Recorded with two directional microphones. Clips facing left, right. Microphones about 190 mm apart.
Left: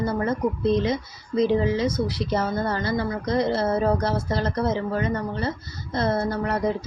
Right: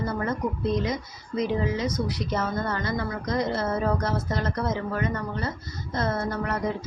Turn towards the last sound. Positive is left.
turn(degrees=30)  # may be behind; listen again after turning